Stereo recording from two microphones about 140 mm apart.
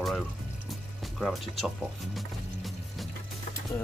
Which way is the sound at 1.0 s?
Centre (ahead or behind).